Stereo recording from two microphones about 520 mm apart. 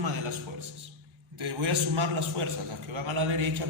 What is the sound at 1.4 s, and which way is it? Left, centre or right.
A man's voice, right.